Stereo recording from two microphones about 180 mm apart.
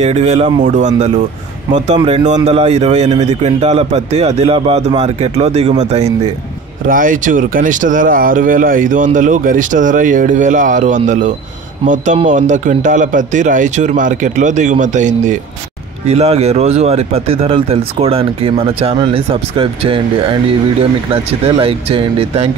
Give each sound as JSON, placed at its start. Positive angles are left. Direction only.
{"t": 0.0, "sound": "speech", "side_deg": -35}
{"t": 6.9, "sound": "speech", "side_deg": -45}